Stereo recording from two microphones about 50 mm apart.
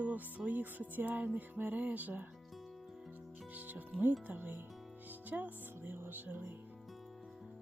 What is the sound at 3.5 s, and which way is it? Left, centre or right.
Speech, right.